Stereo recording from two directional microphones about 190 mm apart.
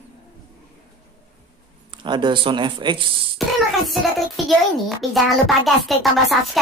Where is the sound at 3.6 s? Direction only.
Centre (ahead or behind).